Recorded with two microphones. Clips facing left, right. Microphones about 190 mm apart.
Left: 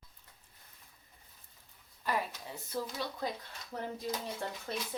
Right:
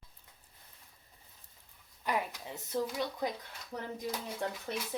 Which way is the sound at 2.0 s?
15° right (ahead or behind).